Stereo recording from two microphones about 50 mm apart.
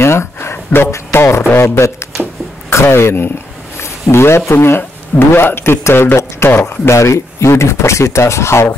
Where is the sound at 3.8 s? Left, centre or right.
Left.